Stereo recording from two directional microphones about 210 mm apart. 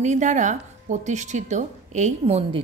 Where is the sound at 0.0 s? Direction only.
35° right (ahead or behind).